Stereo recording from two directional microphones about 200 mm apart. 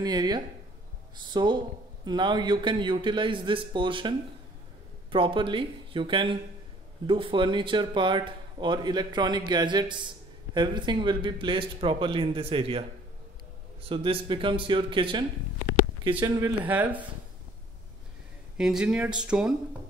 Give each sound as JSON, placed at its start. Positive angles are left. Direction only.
{"t": 0.0, "sound": "speech", "side_deg": -20}
{"t": 5.1, "sound": "speech", "side_deg": -25}
{"t": 13.8, "sound": "speech", "side_deg": -25}
{"t": 18.6, "sound": "speech", "side_deg": -5}